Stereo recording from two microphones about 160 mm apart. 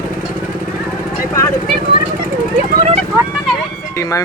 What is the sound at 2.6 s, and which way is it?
Vehicle, 45° right (ahead or behind).